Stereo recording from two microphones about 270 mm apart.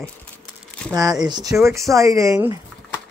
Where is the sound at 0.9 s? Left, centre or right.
Centre.